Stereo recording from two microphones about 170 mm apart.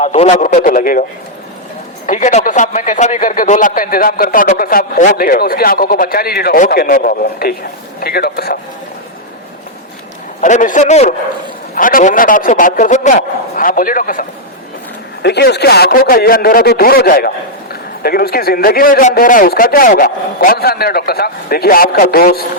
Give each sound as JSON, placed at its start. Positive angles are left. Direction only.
{"t": 0.0, "sound": "a man's voice", "side_deg": 40}
{"t": 2.0, "sound": "speech", "side_deg": 45}
{"t": 10.4, "sound": "a man's voice", "side_deg": 50}
{"t": 11.7, "sound": "a man's voice", "side_deg": 55}
{"t": 15.2, "sound": "speech", "side_deg": 75}